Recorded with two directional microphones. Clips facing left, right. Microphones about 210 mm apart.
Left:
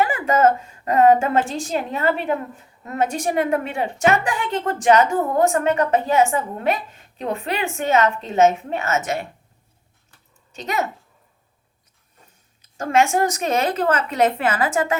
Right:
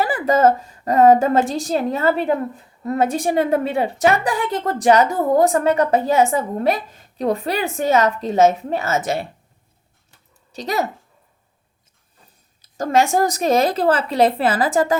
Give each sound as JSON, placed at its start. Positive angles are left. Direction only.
{"t": 0.0, "sound": "a sound", "side_deg": -35}
{"t": 1.0, "sound": "a woman's voice", "side_deg": -40}
{"t": 10.5, "sound": "a woman's voice", "side_deg": -35}
{"t": 12.6, "sound": "a woman's voice", "side_deg": -35}